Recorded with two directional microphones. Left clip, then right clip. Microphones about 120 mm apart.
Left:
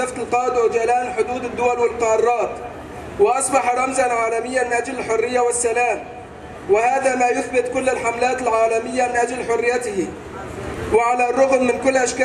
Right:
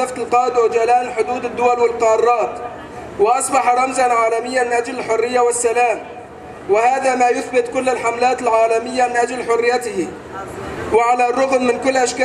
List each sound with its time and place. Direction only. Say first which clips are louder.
0.0 s a man's voice: right 4 dB; 20° right (ahead or behind)